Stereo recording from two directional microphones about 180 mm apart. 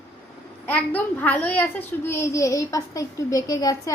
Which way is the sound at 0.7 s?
10° left (ahead or behind).